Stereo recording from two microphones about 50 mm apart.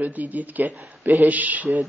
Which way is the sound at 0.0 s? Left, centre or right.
Right.